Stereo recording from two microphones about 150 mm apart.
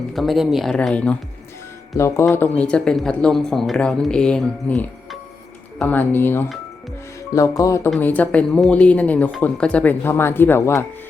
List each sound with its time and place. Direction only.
0.1 s speech: centre (ahead or behind)
2.0 s speech: 20° left (ahead or behind)
7.9 s speech: 10° left (ahead or behind)